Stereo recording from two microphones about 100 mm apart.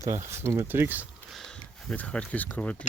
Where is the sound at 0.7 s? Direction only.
20° right (ahead or behind).